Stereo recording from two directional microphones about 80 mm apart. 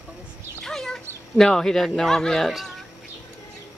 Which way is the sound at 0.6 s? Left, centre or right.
Centre.